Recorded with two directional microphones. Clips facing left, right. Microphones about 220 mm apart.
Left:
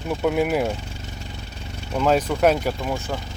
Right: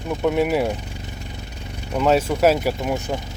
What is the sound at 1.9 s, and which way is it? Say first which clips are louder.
Speech: right 2 dB; 5° right (ahead or behind).